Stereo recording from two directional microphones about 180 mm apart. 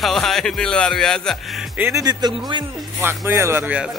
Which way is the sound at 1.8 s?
15° right (ahead or behind).